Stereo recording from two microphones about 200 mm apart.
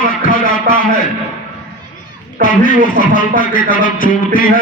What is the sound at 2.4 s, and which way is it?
Speech, 40° left (ahead or behind).